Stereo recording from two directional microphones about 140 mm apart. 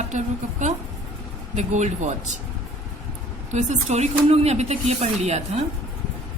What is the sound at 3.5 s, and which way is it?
Speech, 55° right (ahead or behind).